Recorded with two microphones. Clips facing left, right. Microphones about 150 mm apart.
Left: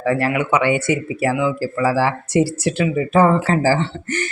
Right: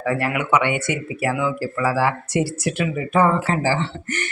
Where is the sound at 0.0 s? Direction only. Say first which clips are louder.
Left 4 dB; 30° left (ahead or behind).